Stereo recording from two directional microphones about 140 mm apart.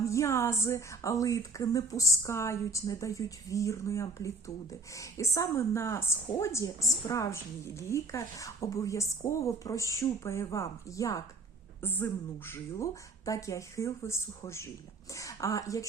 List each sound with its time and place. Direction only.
0.0 s a woman's voice: 20° left (ahead or behind)